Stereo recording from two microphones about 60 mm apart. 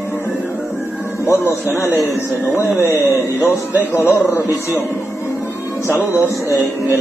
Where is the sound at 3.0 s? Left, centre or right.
Left.